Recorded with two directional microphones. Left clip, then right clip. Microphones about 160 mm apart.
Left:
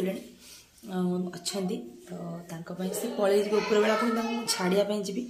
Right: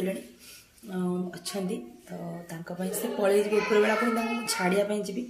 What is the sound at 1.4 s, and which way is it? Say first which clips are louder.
Speech: left 1 dB; 5° left (ahead or behind).